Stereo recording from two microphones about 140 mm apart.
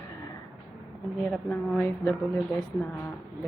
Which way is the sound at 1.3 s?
5° left (ahead or behind).